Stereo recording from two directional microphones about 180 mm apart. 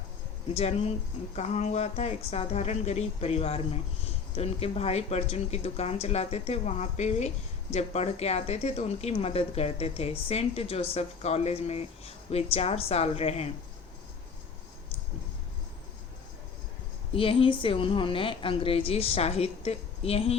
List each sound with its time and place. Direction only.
0.5 s speech: 35° left (ahead or behind)
17.2 s speech: 30° left (ahead or behind)